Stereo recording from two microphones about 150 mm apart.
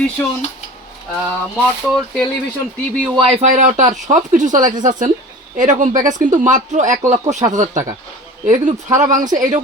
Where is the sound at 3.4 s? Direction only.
50° right (ahead or behind).